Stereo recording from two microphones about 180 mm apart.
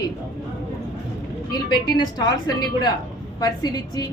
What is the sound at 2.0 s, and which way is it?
Speech, 20° left (ahead or behind).